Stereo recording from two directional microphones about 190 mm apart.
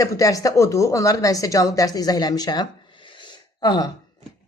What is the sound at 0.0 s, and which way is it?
A woman's voice, 20° left (ahead or behind).